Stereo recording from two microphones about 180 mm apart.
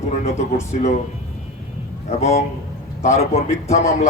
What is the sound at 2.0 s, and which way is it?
A man's voice, 40° left (ahead or behind).